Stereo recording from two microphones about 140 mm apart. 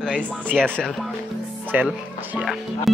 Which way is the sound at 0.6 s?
5° left (ahead or behind).